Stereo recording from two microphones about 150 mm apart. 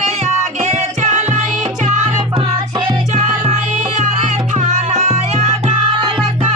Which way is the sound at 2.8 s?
45° right (ahead or behind).